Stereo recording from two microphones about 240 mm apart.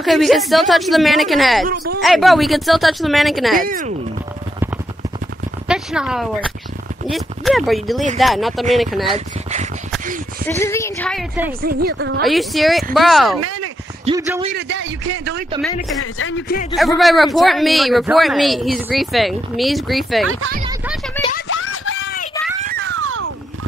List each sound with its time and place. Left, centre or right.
0.0 s speech: centre
3.5 s a woman's voice: right
5.7 s speech: centre
9.1 s speech: right
10.4 s a woman's voice: centre
11.6 s a woman's voice: right
12.3 s speech: centre
13.4 s a sound: right
14.0 s speech: centre
14.7 s a man's voice: right
16.0 s speech: left
17.0 s speech: centre
21.5 s a sound: left
22.6 s a sound: right